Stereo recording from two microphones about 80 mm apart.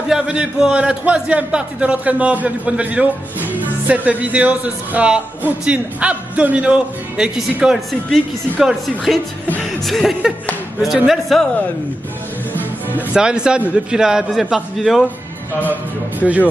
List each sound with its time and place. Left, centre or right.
0.1 s a man's voice: centre
13.1 s a man's voice: centre
15.6 s a man's voice: right